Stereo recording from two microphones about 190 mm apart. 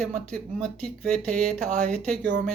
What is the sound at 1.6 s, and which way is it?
Speech, 40° right (ahead or behind).